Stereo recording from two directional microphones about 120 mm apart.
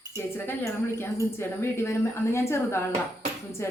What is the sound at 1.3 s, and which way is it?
A woman's voice, 20° left (ahead or behind).